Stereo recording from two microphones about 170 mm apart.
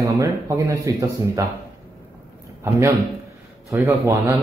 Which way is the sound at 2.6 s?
15° right (ahead or behind).